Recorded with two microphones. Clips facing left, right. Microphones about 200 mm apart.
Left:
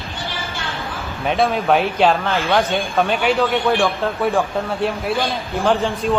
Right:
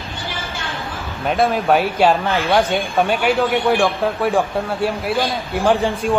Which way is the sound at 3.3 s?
15° right (ahead or behind).